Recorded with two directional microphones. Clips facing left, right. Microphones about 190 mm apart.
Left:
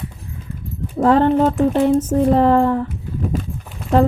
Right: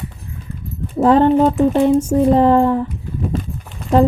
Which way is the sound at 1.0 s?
20° right (ahead or behind).